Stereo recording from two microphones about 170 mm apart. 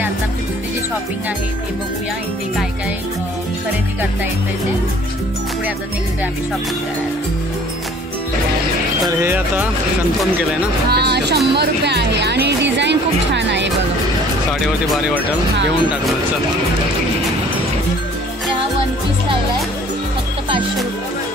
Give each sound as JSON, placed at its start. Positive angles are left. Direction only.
{"t": 9.0, "sound": "speech", "side_deg": -15}
{"t": 10.9, "sound": "speech", "side_deg": -70}
{"t": 14.9, "sound": "speech", "side_deg": 0}